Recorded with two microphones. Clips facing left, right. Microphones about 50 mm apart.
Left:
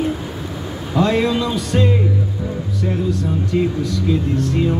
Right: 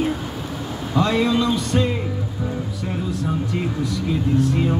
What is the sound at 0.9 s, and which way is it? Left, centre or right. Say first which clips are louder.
Speech: left 2 dB; centre.